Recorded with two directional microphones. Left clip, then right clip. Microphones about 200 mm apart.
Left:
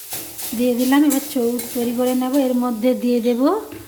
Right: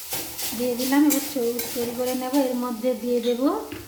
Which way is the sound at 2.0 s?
45° left (ahead or behind).